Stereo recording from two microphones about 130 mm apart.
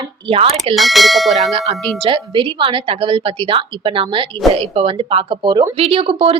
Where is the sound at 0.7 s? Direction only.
Centre (ahead or behind).